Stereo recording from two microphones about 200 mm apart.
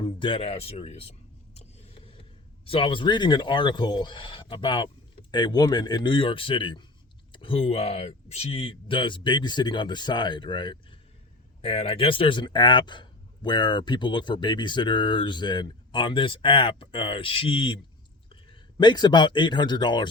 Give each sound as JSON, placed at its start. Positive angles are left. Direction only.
{"t": 0.0, "sound": "speech", "side_deg": 25}
{"t": 1.5, "sound": "vehicle", "side_deg": 30}
{"t": 2.6, "sound": "speech", "side_deg": 25}
{"t": 18.8, "sound": "speech", "side_deg": 20}